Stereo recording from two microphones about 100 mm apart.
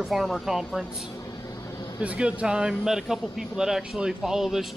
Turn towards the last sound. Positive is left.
turn(degrees=-5)  # may be behind; listen again after turning